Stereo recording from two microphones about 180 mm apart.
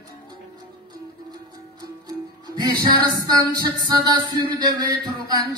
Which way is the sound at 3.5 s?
25° right (ahead or behind).